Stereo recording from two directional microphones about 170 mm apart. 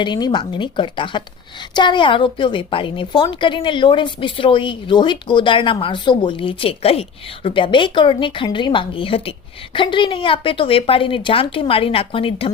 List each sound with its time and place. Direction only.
0.0 s a woman's voice: 25° left (ahead or behind)